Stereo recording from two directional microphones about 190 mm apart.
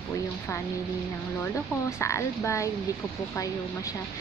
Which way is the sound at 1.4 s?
15° left (ahead or behind).